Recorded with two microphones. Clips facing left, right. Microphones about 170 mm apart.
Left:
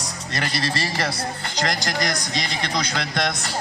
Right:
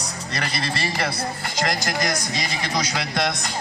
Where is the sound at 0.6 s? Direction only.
40° left (ahead or behind).